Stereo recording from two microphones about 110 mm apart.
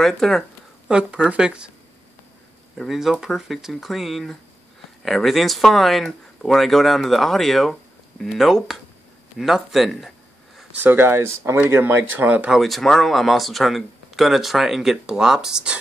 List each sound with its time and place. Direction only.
0.0 s speech: 5° left (ahead or behind)
0.8 s speech: 10° right (ahead or behind)
2.8 s speech: 5° right (ahead or behind)
10.8 s speech: 20° right (ahead or behind)
12.5 s speech: centre (ahead or behind)